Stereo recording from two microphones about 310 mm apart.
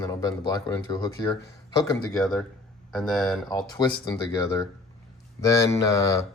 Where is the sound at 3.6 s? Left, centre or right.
Centre.